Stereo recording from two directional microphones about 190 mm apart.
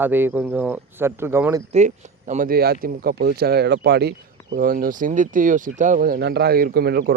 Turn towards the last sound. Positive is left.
turn(degrees=-55)  # may be behind; listen again after turning